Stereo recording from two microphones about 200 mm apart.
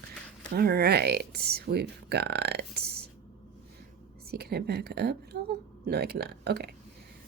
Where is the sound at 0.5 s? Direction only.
50° right (ahead or behind).